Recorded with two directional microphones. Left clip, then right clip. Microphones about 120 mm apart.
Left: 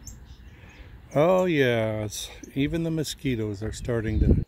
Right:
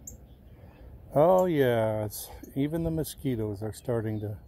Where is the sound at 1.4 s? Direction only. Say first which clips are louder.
Left 2 dB; 30° left (ahead or behind).